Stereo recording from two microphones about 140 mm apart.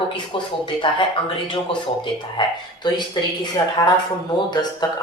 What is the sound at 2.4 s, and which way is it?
A woman's voice, 35° left (ahead or behind).